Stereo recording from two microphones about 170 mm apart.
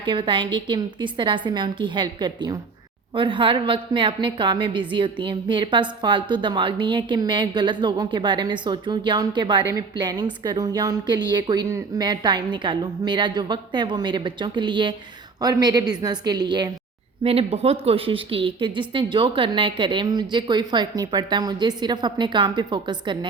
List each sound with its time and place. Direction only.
0.0 s a woman's voice: 30° right (ahead or behind)
17.2 s a woman's voice: 35° right (ahead or behind)